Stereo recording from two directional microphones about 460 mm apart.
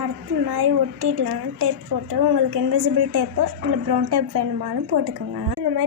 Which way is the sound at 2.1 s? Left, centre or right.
Right.